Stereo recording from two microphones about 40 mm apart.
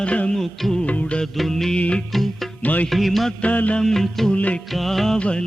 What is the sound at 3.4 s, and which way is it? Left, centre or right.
Music, left.